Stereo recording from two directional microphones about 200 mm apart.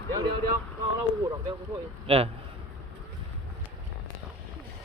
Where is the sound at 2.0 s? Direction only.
30° right (ahead or behind).